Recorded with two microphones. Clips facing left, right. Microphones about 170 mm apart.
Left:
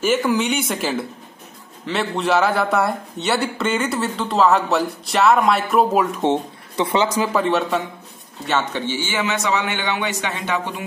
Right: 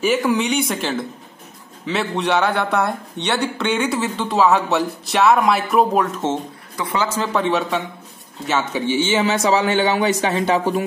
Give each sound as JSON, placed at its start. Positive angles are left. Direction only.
{"t": 0.0, "sound": "speech", "side_deg": 0}
{"t": 6.1, "sound": "speech", "side_deg": 15}
{"t": 7.2, "sound": "speech", "side_deg": 0}
{"t": 8.8, "sound": "a man's voice", "side_deg": -20}